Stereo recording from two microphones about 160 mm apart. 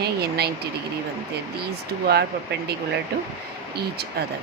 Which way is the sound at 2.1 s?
90° right.